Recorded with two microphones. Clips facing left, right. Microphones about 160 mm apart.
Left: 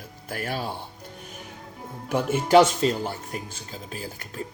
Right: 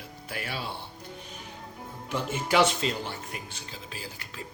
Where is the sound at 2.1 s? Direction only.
45° left (ahead or behind).